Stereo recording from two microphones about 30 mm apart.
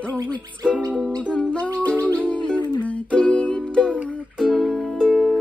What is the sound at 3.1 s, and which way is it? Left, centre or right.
Music, left.